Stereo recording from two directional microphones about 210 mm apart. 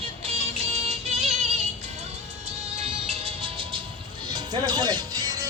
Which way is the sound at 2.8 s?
30° right (ahead or behind).